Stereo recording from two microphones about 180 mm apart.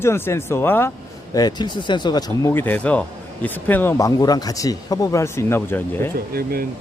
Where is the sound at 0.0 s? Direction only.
15° left (ahead or behind).